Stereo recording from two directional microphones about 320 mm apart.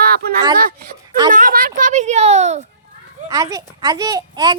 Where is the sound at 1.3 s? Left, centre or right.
Right.